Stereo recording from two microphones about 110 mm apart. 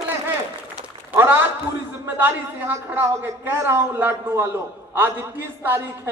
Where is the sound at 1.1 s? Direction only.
20° right (ahead or behind).